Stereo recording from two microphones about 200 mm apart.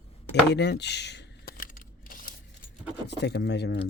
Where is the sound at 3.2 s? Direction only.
60° left (ahead or behind).